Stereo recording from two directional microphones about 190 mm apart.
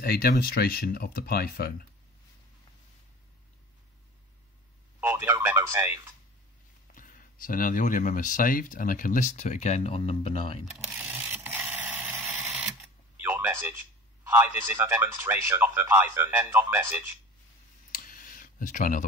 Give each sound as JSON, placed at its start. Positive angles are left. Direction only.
{"t": 0.0, "sound": "speech", "side_deg": 50}
{"t": 5.0, "sound": "speech", "side_deg": -15}
{"t": 6.9, "sound": "speech", "side_deg": 45}
{"t": 10.9, "sound": "a sound", "side_deg": -10}
{"t": 14.2, "sound": "a man's voice", "side_deg": -10}
{"t": 17.9, "sound": "clicking", "side_deg": 45}